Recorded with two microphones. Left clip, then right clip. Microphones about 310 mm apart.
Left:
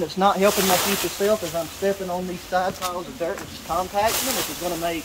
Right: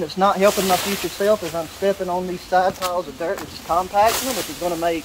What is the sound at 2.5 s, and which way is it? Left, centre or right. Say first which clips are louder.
Speech: right 5 dB; centre.